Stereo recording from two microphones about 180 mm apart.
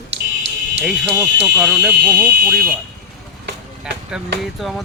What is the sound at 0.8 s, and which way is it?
Speech, 5° right (ahead or behind).